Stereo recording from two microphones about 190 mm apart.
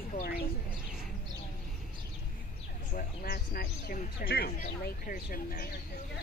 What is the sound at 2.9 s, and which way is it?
Speech, 50° left (ahead or behind).